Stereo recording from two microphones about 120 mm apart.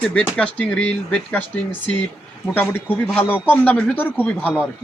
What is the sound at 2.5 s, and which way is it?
Speech, 15° left (ahead or behind).